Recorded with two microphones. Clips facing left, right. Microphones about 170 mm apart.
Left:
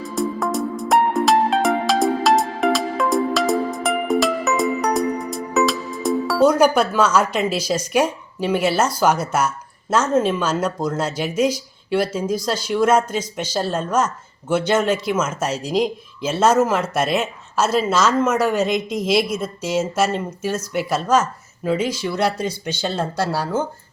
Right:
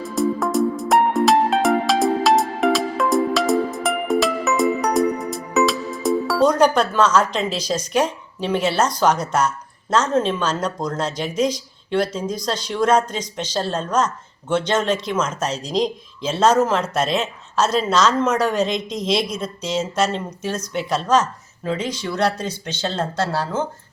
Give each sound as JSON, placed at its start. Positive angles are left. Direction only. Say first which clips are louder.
{"t": 0.0, "sound": "music", "louder": "right 2 dB", "side_deg": 0}
{"t": 9.9, "sound": "speech", "louder": "left 1 dB", "side_deg": 10}